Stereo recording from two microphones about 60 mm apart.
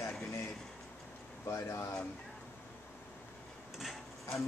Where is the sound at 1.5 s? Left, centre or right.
Left.